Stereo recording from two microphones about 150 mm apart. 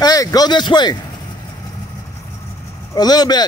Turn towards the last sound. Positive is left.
turn(degrees=25)  # may be behind; listen again after turning